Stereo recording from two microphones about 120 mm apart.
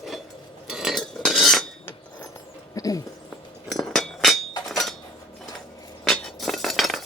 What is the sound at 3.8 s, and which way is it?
Chink, 5° left (ahead or behind).